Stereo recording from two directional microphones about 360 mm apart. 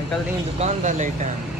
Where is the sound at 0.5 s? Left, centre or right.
Centre.